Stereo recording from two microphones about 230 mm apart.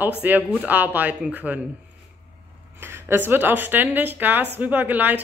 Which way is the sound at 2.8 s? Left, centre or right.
Centre.